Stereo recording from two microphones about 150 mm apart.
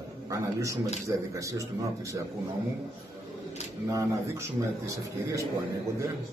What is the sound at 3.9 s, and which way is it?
A man's voice, 20° right (ahead or behind).